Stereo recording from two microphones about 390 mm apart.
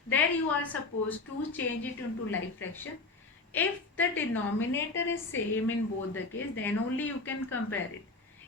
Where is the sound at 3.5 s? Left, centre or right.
Centre.